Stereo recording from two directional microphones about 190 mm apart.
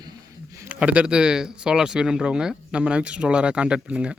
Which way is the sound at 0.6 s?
5° right (ahead or behind).